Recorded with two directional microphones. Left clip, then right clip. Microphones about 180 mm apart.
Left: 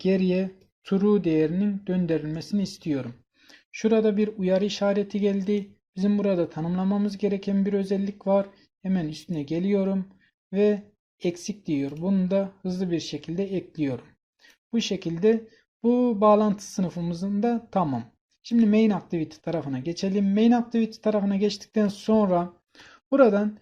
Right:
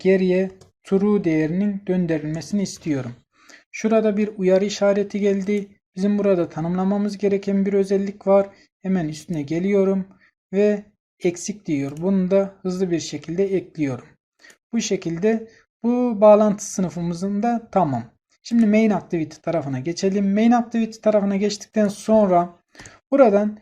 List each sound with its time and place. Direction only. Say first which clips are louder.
0.0 s speech: right 7 dB; 50° left (ahead or behind)
1.2 s speech: right 2 dB; 10° left (ahead or behind)
3.5 s a sound: right 1 dB; 15° left (ahead or behind)
4.0 s speech: right 4 dB; 15° left (ahead or behind)
12.0 s speech: right 5 dB; 40° left (ahead or behind)
12.3 s speech: right 8 dB; 15° left (ahead or behind)